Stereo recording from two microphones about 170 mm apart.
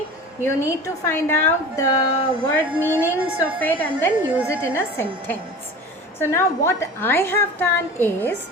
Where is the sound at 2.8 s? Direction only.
10° right (ahead or behind).